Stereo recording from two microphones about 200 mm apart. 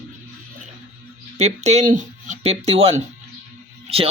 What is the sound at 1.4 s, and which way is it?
A man's voice, 35° right (ahead or behind).